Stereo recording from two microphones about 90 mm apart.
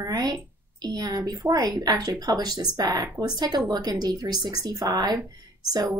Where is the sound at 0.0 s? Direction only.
45° right (ahead or behind).